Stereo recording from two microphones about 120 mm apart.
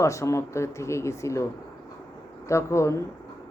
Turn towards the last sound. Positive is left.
turn(degrees=25)  # may be behind; listen again after turning